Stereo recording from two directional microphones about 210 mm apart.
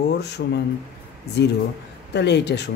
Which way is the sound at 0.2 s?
55° left (ahead or behind).